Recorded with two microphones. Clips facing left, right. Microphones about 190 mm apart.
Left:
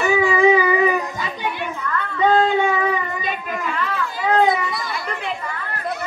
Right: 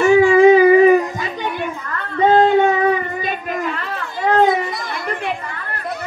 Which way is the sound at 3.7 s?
45° right (ahead or behind).